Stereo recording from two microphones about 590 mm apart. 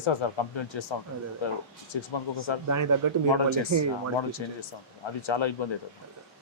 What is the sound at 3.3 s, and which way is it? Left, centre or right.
Speech, left.